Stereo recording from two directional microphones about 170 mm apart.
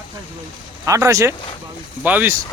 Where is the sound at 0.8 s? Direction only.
20° right (ahead or behind).